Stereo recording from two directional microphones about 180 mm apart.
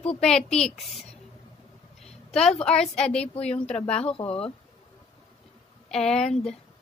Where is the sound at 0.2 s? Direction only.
5° left (ahead or behind).